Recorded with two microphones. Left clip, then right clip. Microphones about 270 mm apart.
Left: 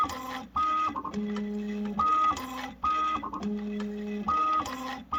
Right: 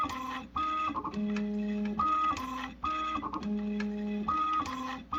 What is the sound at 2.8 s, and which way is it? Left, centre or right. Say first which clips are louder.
Printer: left 6 dB; left.